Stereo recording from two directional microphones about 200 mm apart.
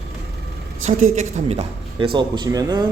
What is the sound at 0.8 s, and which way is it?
Speech, 35° right (ahead or behind).